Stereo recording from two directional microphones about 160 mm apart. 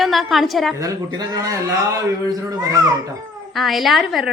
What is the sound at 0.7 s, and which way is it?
A man's voice, 20° right (ahead or behind).